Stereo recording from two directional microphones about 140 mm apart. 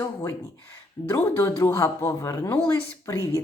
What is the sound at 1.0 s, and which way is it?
Speech, 20° left (ahead or behind).